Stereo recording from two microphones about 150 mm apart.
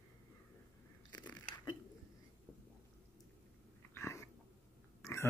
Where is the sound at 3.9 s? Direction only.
20° left (ahead or behind).